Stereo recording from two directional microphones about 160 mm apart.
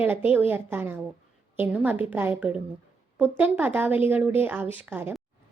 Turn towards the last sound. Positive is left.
turn(degrees=-10)  # may be behind; listen again after turning